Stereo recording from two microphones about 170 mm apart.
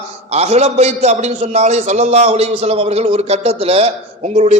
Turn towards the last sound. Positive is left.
turn(degrees=-40)  # may be behind; listen again after turning